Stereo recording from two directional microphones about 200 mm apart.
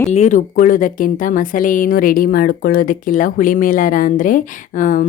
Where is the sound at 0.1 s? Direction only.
35° left (ahead or behind).